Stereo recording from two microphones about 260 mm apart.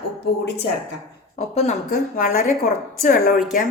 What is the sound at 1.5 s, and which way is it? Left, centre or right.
A woman's voice, left.